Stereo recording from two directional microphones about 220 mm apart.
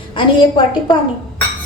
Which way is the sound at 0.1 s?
20° left (ahead or behind).